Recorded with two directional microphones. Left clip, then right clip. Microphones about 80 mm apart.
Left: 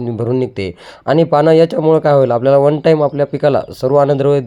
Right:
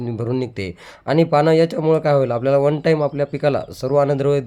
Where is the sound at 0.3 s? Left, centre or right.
Left.